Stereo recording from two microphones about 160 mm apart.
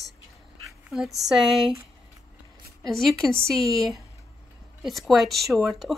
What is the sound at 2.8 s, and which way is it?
Speech, centre (ahead or behind).